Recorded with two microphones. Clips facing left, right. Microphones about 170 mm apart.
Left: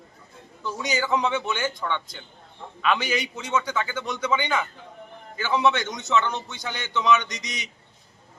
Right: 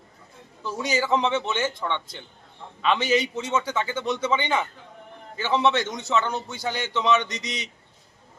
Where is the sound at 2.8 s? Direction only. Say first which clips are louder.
Right 3 dB; 25° right (ahead or behind).